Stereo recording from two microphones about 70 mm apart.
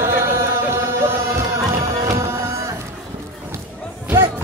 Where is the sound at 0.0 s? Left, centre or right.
Right.